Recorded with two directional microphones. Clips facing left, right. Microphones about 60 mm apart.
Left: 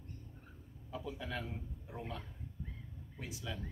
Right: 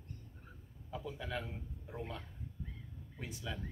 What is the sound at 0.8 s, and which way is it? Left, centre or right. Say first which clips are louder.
A man's voice: even; centre.